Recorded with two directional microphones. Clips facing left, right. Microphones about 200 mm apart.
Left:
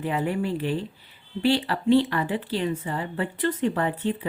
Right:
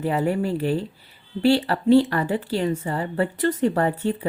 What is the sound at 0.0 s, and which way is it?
Speech, 40° right (ahead or behind).